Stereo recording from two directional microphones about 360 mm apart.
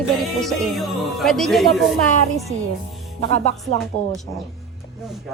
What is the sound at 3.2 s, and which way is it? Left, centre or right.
Music, centre.